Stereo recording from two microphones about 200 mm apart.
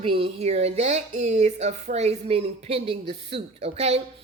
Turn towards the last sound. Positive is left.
turn(degrees=-30)  # may be behind; listen again after turning